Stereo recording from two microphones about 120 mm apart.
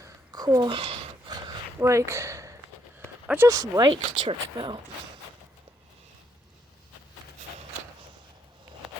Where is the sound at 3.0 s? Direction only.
15° right (ahead or behind).